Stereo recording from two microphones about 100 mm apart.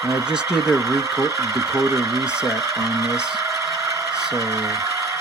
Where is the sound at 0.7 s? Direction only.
35° right (ahead or behind).